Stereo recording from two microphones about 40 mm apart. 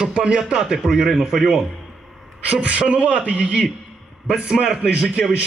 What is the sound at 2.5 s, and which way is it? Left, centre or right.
A woman's voice, right.